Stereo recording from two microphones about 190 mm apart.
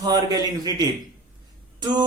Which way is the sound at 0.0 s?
20° right (ahead or behind).